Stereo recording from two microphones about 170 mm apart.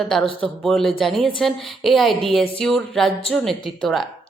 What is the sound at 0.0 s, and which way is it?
A woman's voice, centre (ahead or behind).